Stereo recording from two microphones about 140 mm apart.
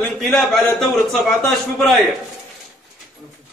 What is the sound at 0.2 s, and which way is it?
A man's voice, centre (ahead or behind).